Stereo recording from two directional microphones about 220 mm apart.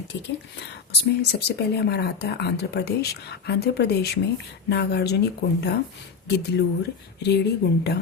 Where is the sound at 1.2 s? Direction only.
45° left (ahead or behind).